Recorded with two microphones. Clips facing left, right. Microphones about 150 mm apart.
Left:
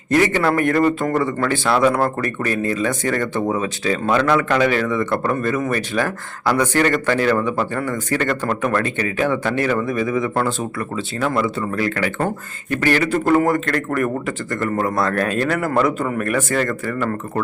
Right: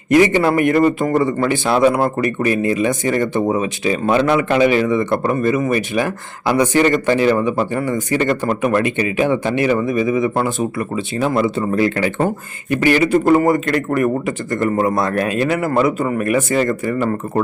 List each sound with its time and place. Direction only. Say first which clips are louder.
0.1 s speech: right 4 dB; 15° right (ahead or behind)
12.7 s speech: right 4 dB; 15° right (ahead or behind)